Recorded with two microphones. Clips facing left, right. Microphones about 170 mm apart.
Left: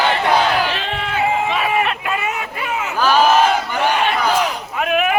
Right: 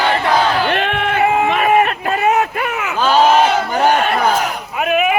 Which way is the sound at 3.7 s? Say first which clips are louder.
Right 4 dB; 45° right (ahead or behind).